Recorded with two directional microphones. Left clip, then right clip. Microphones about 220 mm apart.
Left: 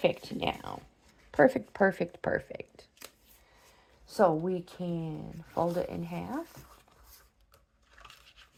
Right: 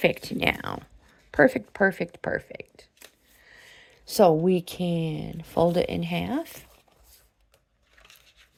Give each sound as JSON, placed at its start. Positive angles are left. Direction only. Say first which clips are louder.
{"t": 0.0, "sound": "speech", "louder": "right 6 dB", "side_deg": -35}
{"t": 1.3, "sound": "speech", "louder": "right 4 dB", "side_deg": -20}
{"t": 4.0, "sound": "speech", "louder": "right 7 dB", "side_deg": -55}